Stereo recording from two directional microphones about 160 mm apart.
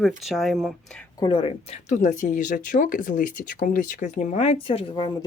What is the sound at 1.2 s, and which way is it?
Speech, 35° left (ahead or behind).